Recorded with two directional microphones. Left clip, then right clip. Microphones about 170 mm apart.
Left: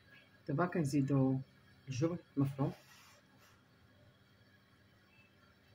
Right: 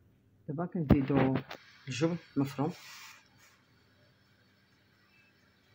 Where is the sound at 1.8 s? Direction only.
55° right (ahead or behind).